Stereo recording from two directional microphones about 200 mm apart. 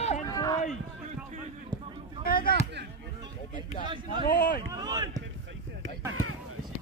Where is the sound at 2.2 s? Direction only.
45° left (ahead or behind).